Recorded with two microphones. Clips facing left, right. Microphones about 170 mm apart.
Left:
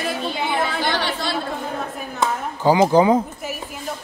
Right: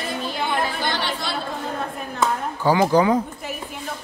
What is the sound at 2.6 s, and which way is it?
Speech, 20° left (ahead or behind).